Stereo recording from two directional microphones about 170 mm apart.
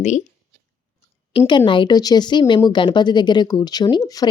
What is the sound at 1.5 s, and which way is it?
Speech, 25° left (ahead or behind).